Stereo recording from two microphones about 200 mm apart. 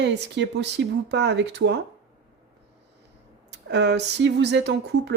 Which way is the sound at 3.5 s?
55° right (ahead or behind).